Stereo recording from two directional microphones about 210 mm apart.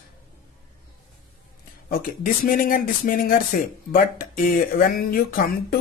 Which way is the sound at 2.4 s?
40° left (ahead or behind).